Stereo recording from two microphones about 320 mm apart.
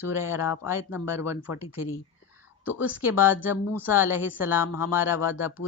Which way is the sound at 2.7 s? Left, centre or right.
Centre.